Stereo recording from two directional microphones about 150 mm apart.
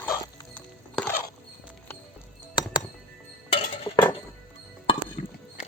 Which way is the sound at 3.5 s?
40° left (ahead or behind).